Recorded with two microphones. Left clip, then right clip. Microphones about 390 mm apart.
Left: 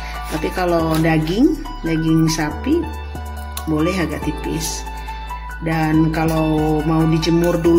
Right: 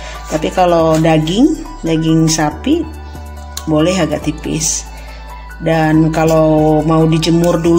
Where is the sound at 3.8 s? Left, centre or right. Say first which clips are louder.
Right 7 dB; left.